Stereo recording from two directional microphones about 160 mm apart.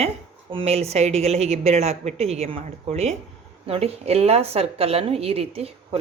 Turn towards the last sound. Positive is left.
turn(degrees=-40)  # may be behind; listen again after turning